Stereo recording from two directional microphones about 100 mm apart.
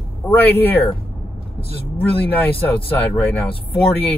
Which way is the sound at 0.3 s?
20° left (ahead or behind).